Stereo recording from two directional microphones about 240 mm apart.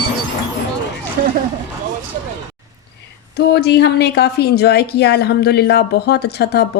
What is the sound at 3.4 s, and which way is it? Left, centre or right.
Speech, left.